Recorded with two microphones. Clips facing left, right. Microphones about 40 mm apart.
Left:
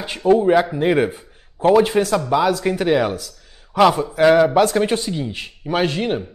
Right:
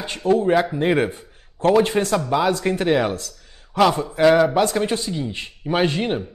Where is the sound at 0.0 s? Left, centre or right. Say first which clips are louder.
Left 3 dB; centre.